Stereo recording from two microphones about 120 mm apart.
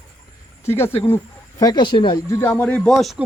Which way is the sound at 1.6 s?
35° left (ahead or behind).